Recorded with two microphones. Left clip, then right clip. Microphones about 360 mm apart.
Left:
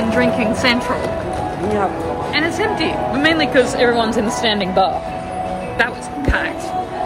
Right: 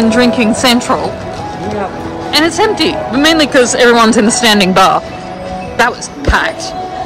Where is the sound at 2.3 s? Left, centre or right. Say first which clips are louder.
Right 9 dB; centre.